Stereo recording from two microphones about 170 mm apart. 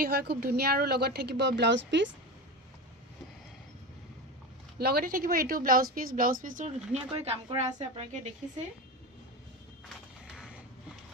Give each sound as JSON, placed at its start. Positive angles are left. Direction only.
{"t": 0.0, "sound": "a woman's voice", "side_deg": -65}
{"t": 4.7, "sound": "speech", "side_deg": -65}
{"t": 7.1, "sound": "a woman's voice", "side_deg": -35}
{"t": 10.2, "sound": "a sound", "side_deg": -5}